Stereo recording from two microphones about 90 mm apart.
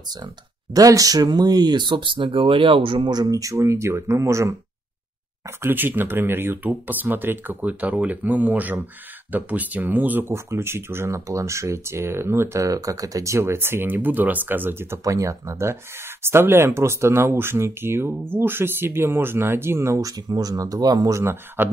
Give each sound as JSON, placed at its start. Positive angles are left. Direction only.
{"t": 0.7, "sound": "speech", "side_deg": -40}
{"t": 3.1, "sound": "speech", "side_deg": -45}
{"t": 5.6, "sound": "speech", "side_deg": -25}
{"t": 10.3, "sound": "speech", "side_deg": -30}
{"t": 21.2, "sound": "speech", "side_deg": -25}